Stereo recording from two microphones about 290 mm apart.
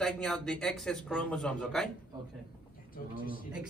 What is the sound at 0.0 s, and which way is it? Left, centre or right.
A man's voice, centre.